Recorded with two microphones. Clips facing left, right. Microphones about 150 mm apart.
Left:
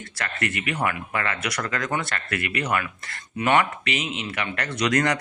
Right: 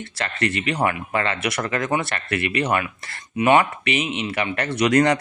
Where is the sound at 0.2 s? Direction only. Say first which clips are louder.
Right 4 dB; 30° right (ahead or behind).